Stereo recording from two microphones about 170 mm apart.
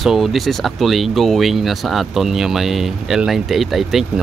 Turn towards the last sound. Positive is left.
turn(degrees=0)  # may be behind; listen again after turning